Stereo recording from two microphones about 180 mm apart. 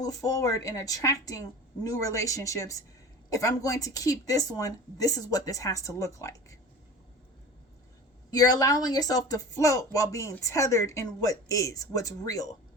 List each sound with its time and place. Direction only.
0.0 s speech: 20° left (ahead or behind)
8.3 s speech: 20° left (ahead or behind)